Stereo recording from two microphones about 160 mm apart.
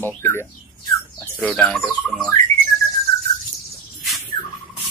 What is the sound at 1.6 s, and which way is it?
Speech, centre (ahead or behind).